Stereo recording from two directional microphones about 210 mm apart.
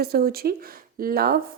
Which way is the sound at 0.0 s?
45° right (ahead or behind).